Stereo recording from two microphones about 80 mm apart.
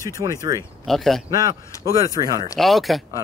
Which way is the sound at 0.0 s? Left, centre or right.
Right.